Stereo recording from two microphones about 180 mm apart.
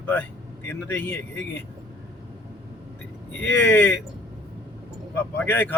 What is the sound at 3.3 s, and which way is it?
Speech, 10° left (ahead or behind).